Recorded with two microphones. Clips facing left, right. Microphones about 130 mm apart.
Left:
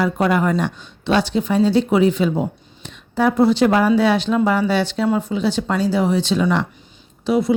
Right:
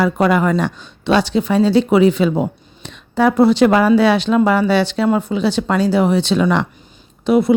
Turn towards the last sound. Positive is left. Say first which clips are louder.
# right 4 dB
turn(degrees=-60)  # may be behind; listen again after turning